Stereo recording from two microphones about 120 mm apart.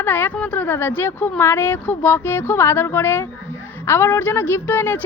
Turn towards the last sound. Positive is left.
turn(degrees=15)  # may be behind; listen again after turning